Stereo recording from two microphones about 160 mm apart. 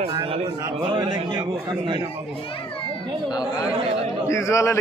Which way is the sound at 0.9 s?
30° right (ahead or behind).